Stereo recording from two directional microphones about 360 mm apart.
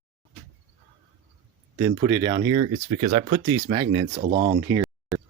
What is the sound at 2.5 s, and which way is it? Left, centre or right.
Speech, right.